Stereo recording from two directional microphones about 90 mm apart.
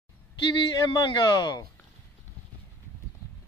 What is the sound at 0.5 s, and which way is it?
Speech, 60° left (ahead or behind).